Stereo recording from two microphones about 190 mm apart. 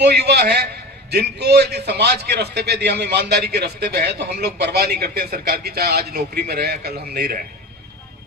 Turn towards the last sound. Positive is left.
turn(degrees=-55)  # may be behind; listen again after turning